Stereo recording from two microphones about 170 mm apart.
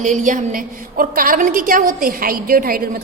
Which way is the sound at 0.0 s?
50° right (ahead or behind).